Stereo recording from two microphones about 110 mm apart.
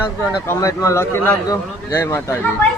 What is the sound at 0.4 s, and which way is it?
A man's voice, 30° left (ahead or behind).